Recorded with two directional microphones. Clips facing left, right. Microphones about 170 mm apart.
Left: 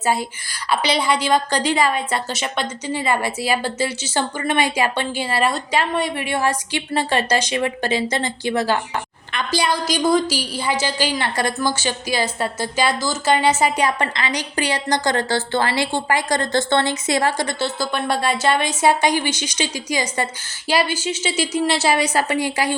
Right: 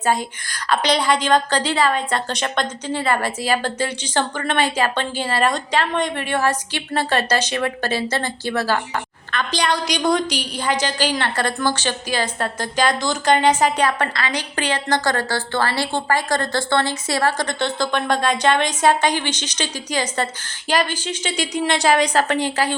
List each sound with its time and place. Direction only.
0.0 s a woman's voice: 5° left (ahead or behind)